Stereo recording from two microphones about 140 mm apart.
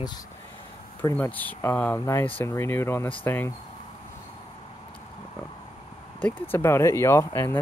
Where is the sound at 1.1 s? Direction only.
10° left (ahead or behind).